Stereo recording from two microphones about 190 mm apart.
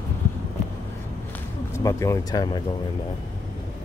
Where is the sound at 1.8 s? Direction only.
15° left (ahead or behind).